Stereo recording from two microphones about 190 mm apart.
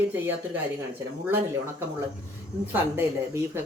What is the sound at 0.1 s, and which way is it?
Speech, 10° right (ahead or behind).